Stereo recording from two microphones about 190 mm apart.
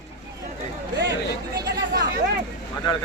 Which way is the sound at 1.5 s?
60° right (ahead or behind).